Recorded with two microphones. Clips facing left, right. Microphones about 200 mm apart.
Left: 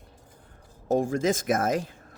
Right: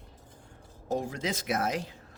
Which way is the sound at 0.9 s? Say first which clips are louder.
Left 8 dB; 50° left (ahead or behind).